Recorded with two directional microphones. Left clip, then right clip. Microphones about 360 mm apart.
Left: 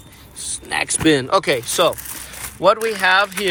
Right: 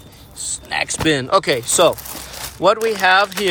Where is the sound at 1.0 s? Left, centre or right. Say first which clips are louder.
Even; centre.